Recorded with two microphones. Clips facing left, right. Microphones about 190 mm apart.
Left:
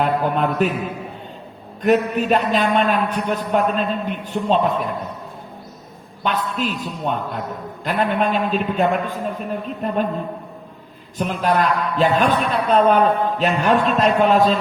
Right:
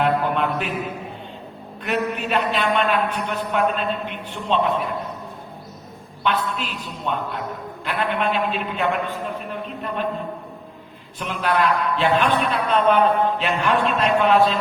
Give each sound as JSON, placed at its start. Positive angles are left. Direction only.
{"t": 0.0, "sound": "mantra", "side_deg": 40}
{"t": 1.8, "sound": "a man's voice", "side_deg": 40}
{"t": 6.2, "sound": "a man's voice", "side_deg": 45}
{"t": 11.2, "sound": "a man's voice", "side_deg": 40}